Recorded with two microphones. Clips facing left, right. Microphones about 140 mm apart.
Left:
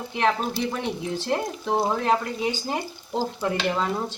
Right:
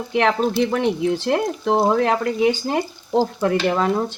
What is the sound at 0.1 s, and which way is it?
Speech, 75° right (ahead or behind).